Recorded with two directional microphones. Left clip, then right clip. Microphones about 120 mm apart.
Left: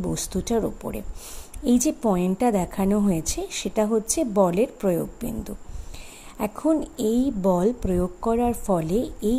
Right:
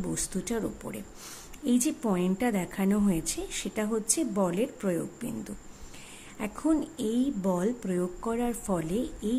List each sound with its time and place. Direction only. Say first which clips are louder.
0.0 s a woman's voice: left 6 dB; 30° left (ahead or behind)